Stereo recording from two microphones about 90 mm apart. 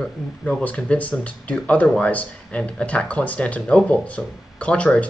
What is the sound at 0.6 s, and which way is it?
Speech, 15° left (ahead or behind).